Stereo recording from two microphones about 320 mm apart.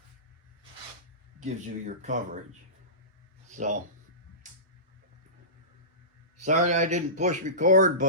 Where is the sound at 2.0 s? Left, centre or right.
Right.